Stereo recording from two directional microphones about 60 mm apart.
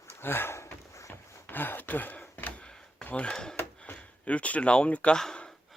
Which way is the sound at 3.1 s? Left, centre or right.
Left.